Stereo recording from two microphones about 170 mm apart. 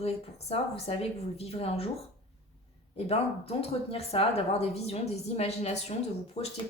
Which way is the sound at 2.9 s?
35° left (ahead or behind).